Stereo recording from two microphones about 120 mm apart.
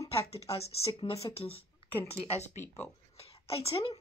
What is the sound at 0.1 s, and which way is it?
Speech, 55° left (ahead or behind).